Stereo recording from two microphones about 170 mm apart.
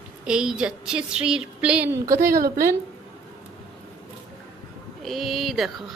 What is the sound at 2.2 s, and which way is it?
Speech, 55° right (ahead or behind).